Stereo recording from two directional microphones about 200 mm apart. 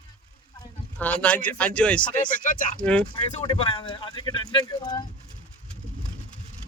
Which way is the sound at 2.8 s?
5° left (ahead or behind).